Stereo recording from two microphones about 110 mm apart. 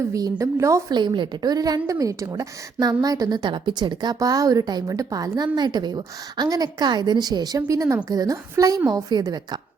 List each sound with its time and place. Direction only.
0.1 s a woman's voice: 30° right (ahead or behind)
0.9 s a woman's voice: 45° right (ahead or behind)